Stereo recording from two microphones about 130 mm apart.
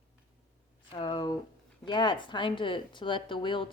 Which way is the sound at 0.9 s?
35° left (ahead or behind).